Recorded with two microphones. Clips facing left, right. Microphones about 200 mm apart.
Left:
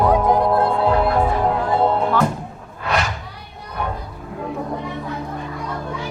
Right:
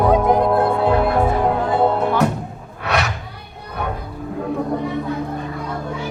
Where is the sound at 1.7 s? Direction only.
60° right (ahead or behind).